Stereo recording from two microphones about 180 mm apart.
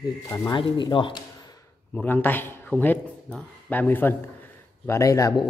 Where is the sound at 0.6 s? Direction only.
25° left (ahead or behind).